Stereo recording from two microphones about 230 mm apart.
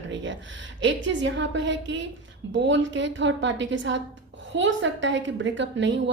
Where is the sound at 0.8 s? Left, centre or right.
Right.